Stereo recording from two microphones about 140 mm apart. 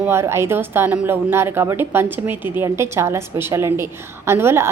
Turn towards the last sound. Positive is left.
turn(degrees=-20)  # may be behind; listen again after turning